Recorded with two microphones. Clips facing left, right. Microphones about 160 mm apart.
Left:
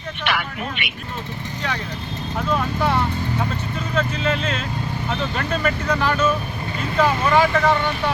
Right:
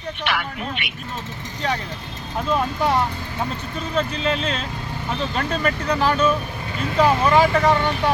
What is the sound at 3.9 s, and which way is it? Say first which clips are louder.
Speech: even; 35° right (ahead or behind).